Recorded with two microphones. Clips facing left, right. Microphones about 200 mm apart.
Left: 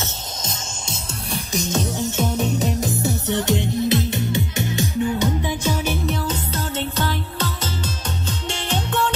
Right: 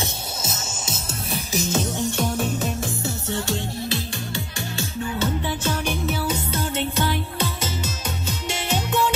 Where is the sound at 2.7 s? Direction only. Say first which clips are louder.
Left 5 dB; 20° left (ahead or behind).